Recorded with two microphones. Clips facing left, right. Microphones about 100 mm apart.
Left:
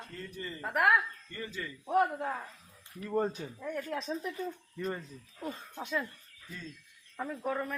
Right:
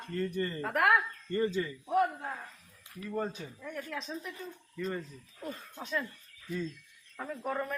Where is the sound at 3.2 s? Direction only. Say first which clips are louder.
Left 4 dB; 35° left (ahead or behind).